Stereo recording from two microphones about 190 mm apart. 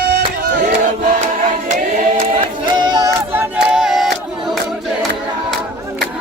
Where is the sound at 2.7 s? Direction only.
25° right (ahead or behind).